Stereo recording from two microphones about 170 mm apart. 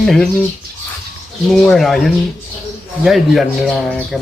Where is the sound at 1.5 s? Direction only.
Centre (ahead or behind).